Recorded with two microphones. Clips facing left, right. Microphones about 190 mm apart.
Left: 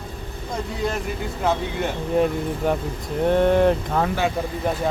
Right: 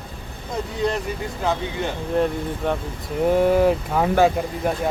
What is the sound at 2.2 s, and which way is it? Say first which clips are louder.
Speech: left 1 dB; 5° left (ahead or behind).